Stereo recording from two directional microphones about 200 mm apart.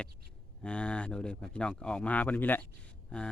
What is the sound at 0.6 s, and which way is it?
Speech, 5° left (ahead or behind).